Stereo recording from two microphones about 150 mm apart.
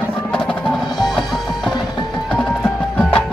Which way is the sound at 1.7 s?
30° left (ahead or behind).